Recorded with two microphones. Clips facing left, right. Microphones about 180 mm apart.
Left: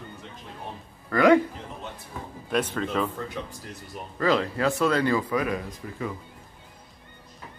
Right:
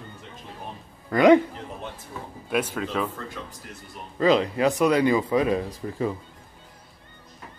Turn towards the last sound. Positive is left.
turn(degrees=-30)  # may be behind; listen again after turning